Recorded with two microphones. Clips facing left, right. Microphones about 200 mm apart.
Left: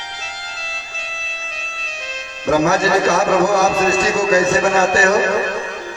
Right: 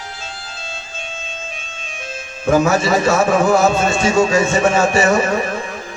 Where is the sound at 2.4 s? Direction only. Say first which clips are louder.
Right 1 dB; 35° left (ahead or behind).